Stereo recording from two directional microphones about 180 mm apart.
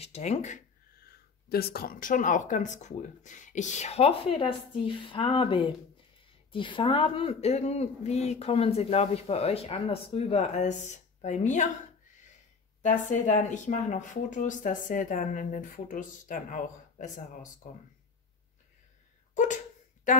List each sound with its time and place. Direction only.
0.0 s speech: 35° left (ahead or behind)
1.0 s speech: 60° left (ahead or behind); by 11.7 s 40° left (ahead or behind)
12.8 s speech: 45° left (ahead or behind)
19.3 s a sound: 40° left (ahead or behind)